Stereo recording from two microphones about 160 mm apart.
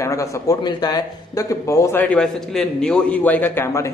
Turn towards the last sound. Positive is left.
turn(degrees=15)  # may be behind; listen again after turning